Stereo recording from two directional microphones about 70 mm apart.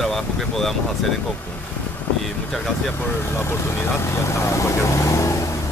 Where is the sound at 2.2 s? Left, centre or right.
Centre.